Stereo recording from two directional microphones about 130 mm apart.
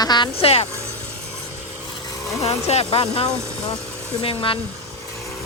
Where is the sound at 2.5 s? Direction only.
50° left (ahead or behind).